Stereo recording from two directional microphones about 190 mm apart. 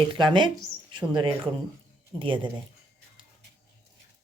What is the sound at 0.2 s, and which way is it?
Speech, 25° right (ahead or behind).